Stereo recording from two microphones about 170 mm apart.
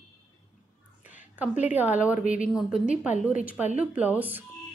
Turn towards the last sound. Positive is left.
turn(degrees=-10)  # may be behind; listen again after turning